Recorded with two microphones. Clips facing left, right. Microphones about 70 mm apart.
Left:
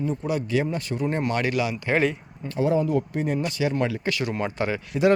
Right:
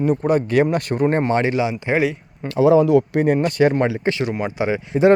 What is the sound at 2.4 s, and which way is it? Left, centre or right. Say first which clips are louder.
Speech: right 9 dB; right.